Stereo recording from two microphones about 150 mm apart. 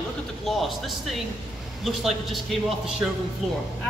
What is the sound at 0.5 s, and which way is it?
Speech, centre (ahead or behind).